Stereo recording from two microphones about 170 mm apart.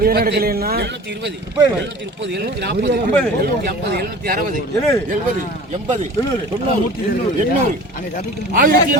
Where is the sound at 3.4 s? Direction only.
65° right (ahead or behind).